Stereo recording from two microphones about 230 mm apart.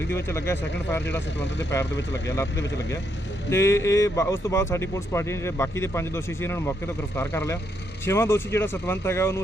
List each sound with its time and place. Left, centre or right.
0.1 s speech: centre
1.9 s speech: left
3.5 s speech: centre